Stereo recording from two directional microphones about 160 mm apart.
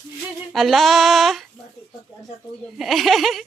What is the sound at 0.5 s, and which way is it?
Speech, centre (ahead or behind).